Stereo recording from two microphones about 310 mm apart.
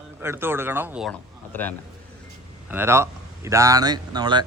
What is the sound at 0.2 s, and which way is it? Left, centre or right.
Speech, centre.